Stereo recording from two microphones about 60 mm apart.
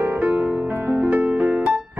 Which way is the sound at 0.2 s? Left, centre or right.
Right.